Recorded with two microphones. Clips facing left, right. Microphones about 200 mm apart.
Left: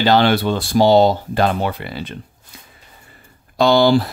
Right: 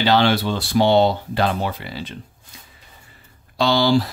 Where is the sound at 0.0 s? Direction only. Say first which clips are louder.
Left 3 dB; 50° left (ahead or behind).